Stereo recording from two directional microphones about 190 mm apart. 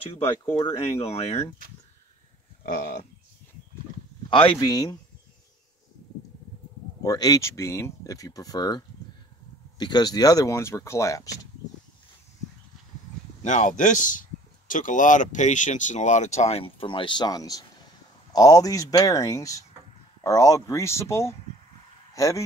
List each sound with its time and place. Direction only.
0.0 s speech: 30° left (ahead or behind)
2.6 s speech: 50° left (ahead or behind)
4.3 s speech: 25° left (ahead or behind)
7.0 s speech: 20° left (ahead or behind)
13.4 s speech: 40° left (ahead or behind); by 22.4 s 15° left (ahead or behind)